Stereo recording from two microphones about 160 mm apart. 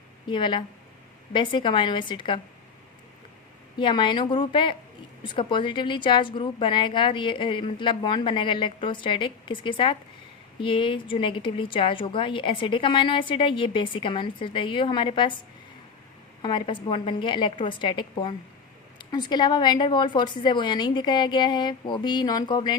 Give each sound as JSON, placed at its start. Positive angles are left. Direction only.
{"t": 0.3, "sound": "a woman's voice", "side_deg": 30}
{"t": 3.8, "sound": "a woman's voice", "side_deg": 30}
{"t": 16.4, "sound": "a woman's voice", "side_deg": 30}